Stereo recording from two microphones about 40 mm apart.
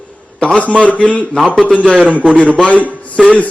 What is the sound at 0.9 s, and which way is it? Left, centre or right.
A man's voice, left.